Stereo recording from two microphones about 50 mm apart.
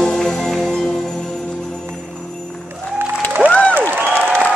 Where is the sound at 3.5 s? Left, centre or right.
Left.